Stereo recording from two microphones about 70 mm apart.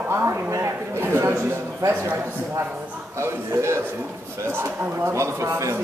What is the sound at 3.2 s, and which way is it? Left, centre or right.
A man's voice, right.